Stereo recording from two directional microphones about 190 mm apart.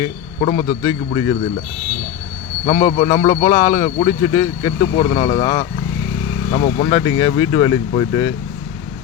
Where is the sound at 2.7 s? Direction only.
30° left (ahead or behind).